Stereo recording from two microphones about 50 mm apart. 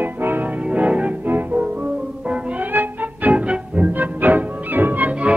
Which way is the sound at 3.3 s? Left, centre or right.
Right.